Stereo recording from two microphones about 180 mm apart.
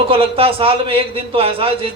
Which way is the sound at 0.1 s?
30° right (ahead or behind).